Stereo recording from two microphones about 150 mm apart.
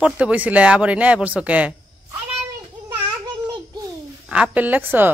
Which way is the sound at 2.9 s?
25° right (ahead or behind).